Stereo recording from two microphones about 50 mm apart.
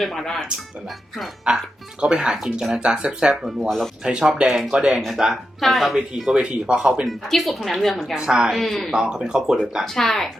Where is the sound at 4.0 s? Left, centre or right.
Centre.